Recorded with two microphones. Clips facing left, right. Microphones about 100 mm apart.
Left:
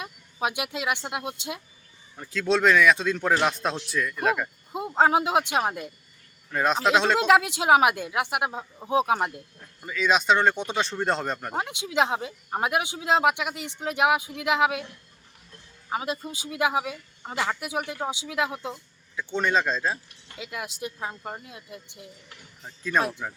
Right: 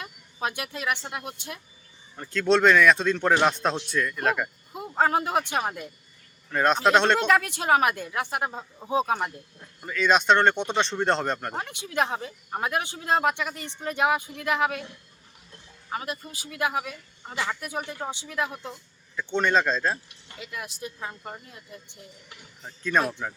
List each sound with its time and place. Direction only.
0.0 s speech: 15° left (ahead or behind)
2.1 s speech: centre (ahead or behind)
4.7 s speech: 20° left (ahead or behind)
6.5 s speech: centre (ahead or behind)
7.3 s speech: 15° left (ahead or behind)
11.5 s speech: 15° left (ahead or behind)
15.9 s speech: 20° left (ahead or behind); by 20.0 s 5° left (ahead or behind)
21.0 s speech: 10° left (ahead or behind)